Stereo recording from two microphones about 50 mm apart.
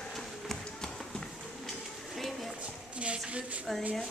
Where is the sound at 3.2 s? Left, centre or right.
Right.